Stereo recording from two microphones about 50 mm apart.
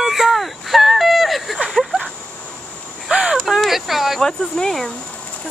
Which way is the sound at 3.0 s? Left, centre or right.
Centre.